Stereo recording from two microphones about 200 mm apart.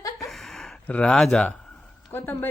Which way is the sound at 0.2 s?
Centre (ahead or behind).